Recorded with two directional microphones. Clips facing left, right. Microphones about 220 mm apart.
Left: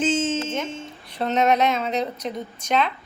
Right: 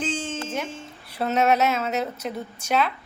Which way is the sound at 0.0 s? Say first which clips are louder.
Left 7 dB; 20° left (ahead or behind).